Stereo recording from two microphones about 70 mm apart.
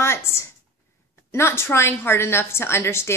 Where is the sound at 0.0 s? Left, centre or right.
Left.